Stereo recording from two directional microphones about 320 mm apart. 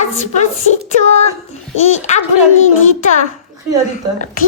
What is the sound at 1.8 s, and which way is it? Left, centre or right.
Child singing, left.